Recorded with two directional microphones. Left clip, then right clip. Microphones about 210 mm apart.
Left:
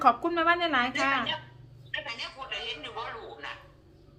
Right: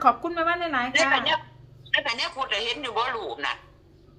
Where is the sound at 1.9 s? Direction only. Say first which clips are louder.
Right 10 dB; 55° right (ahead or behind).